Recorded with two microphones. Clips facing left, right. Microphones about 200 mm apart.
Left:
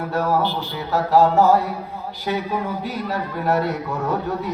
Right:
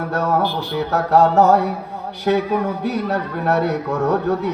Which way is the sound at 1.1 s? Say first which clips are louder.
Right 2 dB; 70° right (ahead or behind).